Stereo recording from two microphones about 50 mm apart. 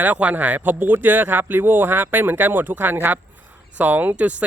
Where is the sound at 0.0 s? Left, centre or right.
Right.